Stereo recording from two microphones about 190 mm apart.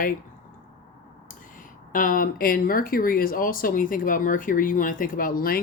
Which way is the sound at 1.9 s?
45° left (ahead or behind).